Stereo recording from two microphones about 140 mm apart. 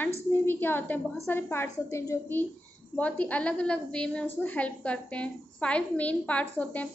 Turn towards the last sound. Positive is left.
turn(degrees=10)  # may be behind; listen again after turning